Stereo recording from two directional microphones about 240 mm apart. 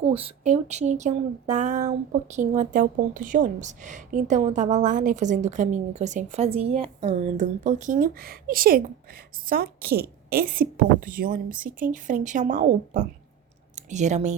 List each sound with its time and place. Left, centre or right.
0.0 s speech: right
11.5 s speech: centre
12.0 s speech: right